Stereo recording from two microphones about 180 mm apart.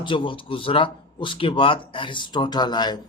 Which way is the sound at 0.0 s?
25° left (ahead or behind).